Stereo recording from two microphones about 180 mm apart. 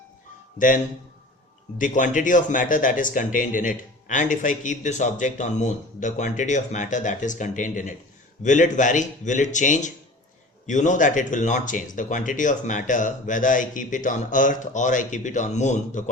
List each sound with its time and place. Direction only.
1.8 s speech: 45° left (ahead or behind)